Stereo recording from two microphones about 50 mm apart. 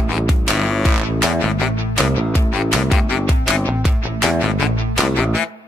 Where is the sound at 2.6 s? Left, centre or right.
Centre.